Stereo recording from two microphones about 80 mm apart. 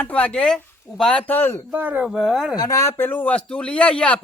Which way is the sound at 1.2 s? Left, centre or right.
Left.